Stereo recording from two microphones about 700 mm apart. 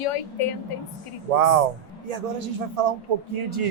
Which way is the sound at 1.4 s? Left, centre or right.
Right.